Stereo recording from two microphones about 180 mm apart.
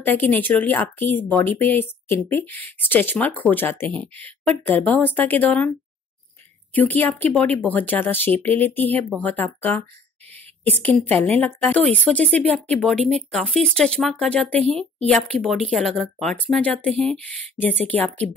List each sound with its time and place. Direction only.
0.0 s speech: 10° left (ahead or behind)
6.7 s speech: 10° left (ahead or behind)